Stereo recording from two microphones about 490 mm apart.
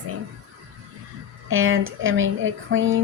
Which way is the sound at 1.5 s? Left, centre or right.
Right.